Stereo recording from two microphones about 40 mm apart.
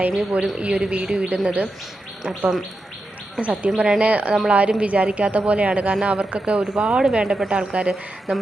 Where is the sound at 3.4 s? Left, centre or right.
Right.